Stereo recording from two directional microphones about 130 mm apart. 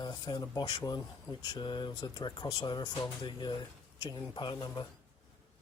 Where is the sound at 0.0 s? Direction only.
35° left (ahead or behind).